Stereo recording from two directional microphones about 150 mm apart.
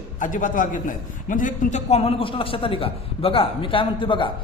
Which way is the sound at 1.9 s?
40° left (ahead or behind).